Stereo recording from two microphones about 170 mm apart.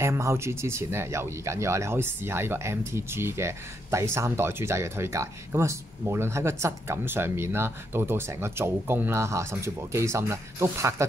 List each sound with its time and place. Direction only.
0.0 s speech: 15° right (ahead or behind)